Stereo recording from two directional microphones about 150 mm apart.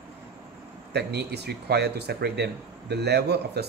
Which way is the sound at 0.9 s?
90° right.